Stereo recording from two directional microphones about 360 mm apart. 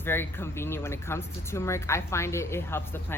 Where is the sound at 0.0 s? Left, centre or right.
Centre.